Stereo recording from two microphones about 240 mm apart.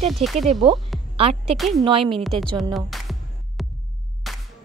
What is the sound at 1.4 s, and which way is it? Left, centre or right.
Speech, centre.